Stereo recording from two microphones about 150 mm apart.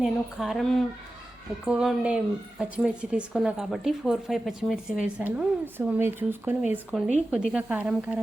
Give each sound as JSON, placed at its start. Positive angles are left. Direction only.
{"t": 0.0, "sound": "a woman's voice", "side_deg": 0}
{"t": 6.9, "sound": "a woman's voice", "side_deg": 0}